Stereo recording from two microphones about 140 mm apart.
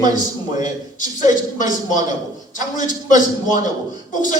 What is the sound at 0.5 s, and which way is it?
A man's voice, 65° left (ahead or behind).